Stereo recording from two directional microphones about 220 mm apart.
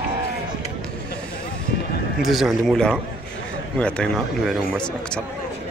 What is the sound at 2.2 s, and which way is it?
Speech, centre (ahead or behind).